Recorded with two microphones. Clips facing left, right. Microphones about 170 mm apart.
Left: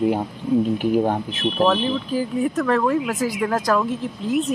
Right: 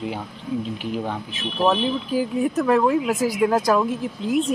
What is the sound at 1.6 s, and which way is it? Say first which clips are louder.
Speech: even; 10° right (ahead or behind).